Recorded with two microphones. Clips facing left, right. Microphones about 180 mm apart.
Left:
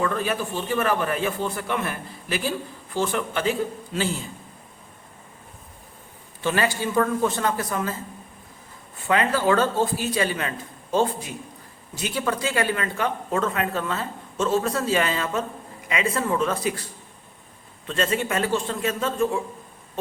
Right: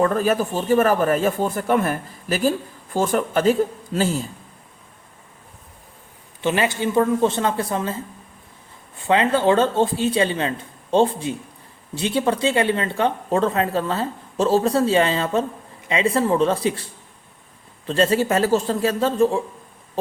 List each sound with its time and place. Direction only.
0.0 s speech: 40° right (ahead or behind)
6.4 s speech: 20° right (ahead or behind)
9.0 s speech: 25° right (ahead or behind)
17.8 s speech: 35° right (ahead or behind)